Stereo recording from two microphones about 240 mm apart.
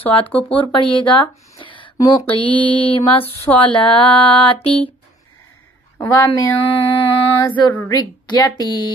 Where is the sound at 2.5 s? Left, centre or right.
Centre.